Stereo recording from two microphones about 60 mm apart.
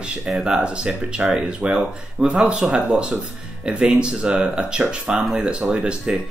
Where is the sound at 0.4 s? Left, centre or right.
Centre.